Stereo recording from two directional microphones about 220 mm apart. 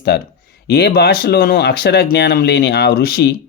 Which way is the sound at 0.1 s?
50° left (ahead or behind).